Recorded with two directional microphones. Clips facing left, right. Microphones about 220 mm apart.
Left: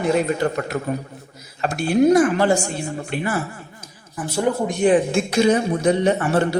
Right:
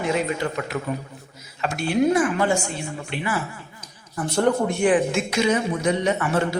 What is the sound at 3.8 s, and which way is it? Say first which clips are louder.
Speech: right 1 dB; 5° left (ahead or behind).